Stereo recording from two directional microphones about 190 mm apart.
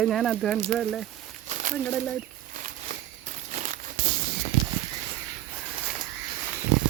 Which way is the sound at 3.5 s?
40° right (ahead or behind).